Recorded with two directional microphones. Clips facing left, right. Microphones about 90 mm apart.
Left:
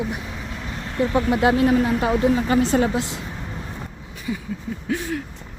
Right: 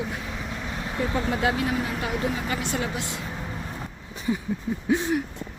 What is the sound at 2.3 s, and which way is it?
Speech, 35° left (ahead or behind).